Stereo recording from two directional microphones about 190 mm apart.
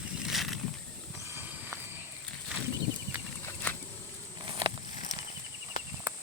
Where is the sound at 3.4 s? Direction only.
10° left (ahead or behind).